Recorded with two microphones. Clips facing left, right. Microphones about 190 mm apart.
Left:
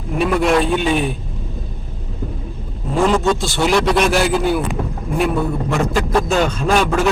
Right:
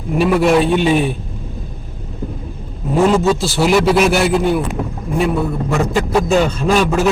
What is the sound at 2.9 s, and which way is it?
A man's voice, 5° right (ahead or behind).